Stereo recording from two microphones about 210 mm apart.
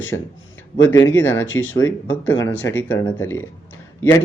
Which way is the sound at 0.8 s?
15° left (ahead or behind).